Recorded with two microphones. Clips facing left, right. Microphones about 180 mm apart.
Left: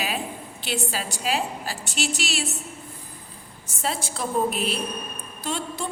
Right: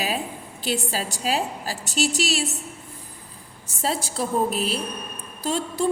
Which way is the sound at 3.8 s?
35° right (ahead or behind).